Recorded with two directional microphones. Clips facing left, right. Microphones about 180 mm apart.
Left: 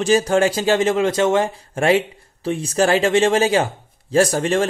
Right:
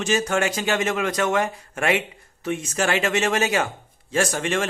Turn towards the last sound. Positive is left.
turn(degrees=35)  # may be behind; listen again after turning